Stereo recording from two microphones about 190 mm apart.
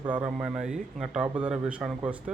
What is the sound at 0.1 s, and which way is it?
Speech, 5° right (ahead or behind).